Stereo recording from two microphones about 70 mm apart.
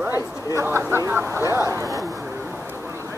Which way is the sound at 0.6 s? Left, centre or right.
Right.